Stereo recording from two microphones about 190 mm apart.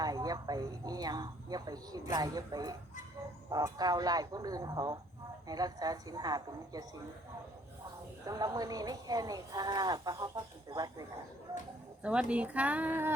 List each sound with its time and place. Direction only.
0.0 s speech: 20° right (ahead or behind)
8.2 s speech: 20° right (ahead or behind)
12.0 s speech: 5° right (ahead or behind)